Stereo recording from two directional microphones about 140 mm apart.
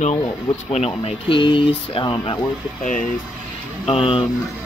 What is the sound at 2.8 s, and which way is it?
Speech, 70° left (ahead or behind).